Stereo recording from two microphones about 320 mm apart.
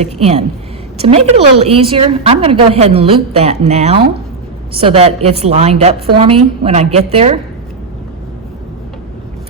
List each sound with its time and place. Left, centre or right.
0.0 s a woman's voice: centre